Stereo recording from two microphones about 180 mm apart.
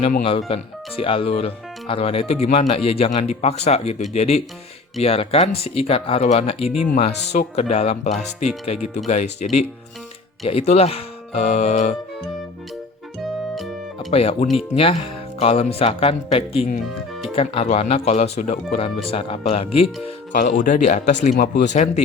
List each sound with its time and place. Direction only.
0.2 s speech: 30° left (ahead or behind)
13.2 s music: centre (ahead or behind)
14.1 s speech: 35° left (ahead or behind)
20.6 s speech: 45° left (ahead or behind)
21.3 s speech: 60° left (ahead or behind)
21.7 s speech: 40° left (ahead or behind)